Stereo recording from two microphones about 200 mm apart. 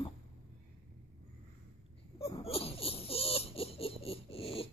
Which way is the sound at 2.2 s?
30° left (ahead or behind).